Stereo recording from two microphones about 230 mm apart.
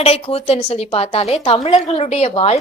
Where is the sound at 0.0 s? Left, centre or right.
Left.